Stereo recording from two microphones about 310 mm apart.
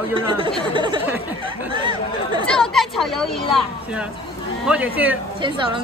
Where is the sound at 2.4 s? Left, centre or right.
Centre.